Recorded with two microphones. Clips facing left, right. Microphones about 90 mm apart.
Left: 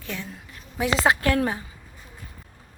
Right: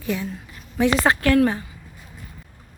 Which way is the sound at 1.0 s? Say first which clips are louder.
Right 2 dB; 20° left (ahead or behind).